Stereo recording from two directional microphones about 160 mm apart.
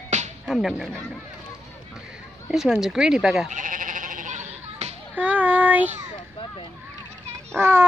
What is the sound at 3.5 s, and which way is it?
Sheep, 55° right (ahead or behind).